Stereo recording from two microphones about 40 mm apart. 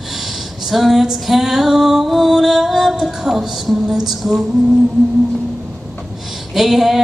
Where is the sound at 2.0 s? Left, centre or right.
Centre.